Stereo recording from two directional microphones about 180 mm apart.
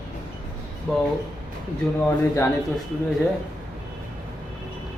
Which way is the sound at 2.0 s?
15° left (ahead or behind).